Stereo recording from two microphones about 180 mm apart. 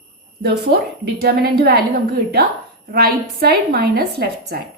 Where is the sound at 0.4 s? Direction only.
60° right (ahead or behind).